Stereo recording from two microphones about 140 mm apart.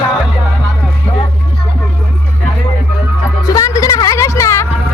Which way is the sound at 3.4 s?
25° left (ahead or behind).